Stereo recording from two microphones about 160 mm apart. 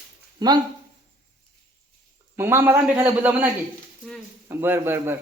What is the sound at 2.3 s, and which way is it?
A man's voice, 15° right (ahead or behind).